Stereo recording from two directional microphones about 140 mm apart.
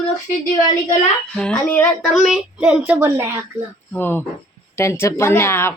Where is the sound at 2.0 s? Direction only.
Centre (ahead or behind).